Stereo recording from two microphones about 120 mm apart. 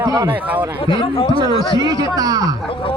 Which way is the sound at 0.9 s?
50° left (ahead or behind).